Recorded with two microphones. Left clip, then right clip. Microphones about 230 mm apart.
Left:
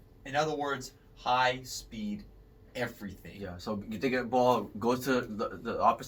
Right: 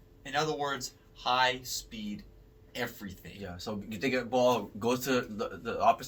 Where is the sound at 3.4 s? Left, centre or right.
Centre.